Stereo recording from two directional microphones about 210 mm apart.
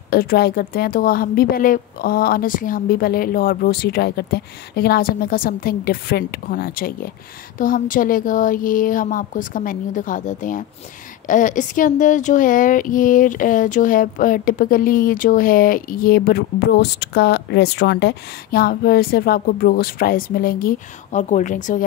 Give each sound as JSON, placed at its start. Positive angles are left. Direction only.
{"t": 0.1, "sound": "a woman's voice", "side_deg": 45}